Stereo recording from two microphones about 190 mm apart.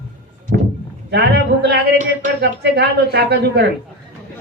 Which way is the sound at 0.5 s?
60° right (ahead or behind).